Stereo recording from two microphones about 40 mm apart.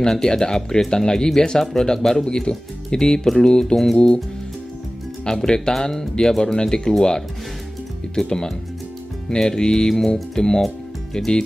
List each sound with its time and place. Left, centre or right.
0.0 s speech: centre
5.2 s speech: centre
9.3 s music: centre
10.3 s speech: centre
11.1 s music: centre